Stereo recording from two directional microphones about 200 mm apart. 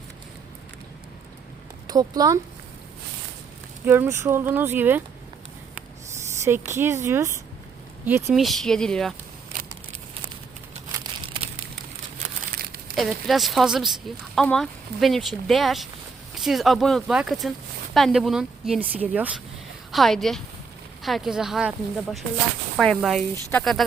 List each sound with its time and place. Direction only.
1.9 s speech: 20° right (ahead or behind)
3.8 s speech: 10° right (ahead or behind)
6.7 s speech: 10° right (ahead or behind)
13.0 s speech: centre (ahead or behind)